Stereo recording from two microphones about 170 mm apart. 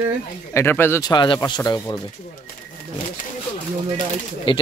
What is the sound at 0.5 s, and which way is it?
Speech, 15° left (ahead or behind).